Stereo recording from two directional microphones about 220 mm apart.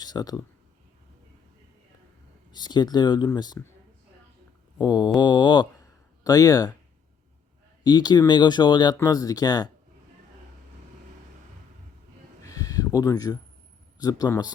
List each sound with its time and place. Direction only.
0.0 s speech: 15° left (ahead or behind)
2.5 s speech: 20° left (ahead or behind)
4.8 s speech: 20° left (ahead or behind)
7.9 s speech: 20° left (ahead or behind)
12.4 s a sound: 15° left (ahead or behind)
14.0 s a man's voice: 15° left (ahead or behind)